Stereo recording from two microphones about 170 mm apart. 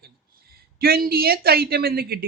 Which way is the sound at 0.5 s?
60° right (ahead or behind).